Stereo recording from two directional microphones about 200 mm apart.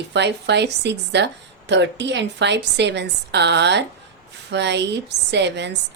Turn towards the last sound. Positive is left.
turn(degrees=-60)  # may be behind; listen again after turning